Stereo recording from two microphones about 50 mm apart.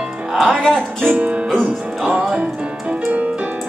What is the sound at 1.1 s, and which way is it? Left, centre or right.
Music, right.